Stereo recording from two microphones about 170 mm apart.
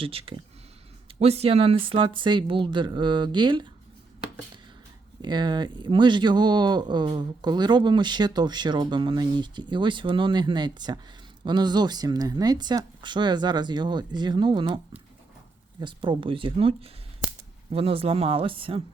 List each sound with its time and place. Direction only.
0.0 s speech: 35° right (ahead or behind)
5.2 s speech: 25° right (ahead or behind)
15.8 s speech: 30° right (ahead or behind)